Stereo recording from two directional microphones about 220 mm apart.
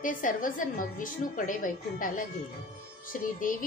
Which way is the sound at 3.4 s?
40° left (ahead or behind).